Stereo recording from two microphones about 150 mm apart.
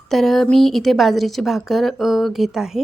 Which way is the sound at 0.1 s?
Centre (ahead or behind).